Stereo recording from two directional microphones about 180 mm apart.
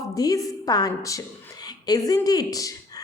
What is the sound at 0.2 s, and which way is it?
A woman's voice, 20° left (ahead or behind).